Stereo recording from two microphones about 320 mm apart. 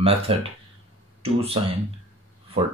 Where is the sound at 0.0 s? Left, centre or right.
Centre.